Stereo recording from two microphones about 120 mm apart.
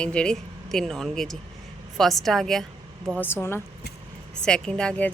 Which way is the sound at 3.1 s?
20° left (ahead or behind).